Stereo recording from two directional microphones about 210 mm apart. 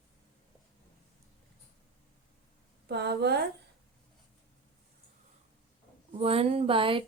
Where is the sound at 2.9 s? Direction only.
50° right (ahead or behind).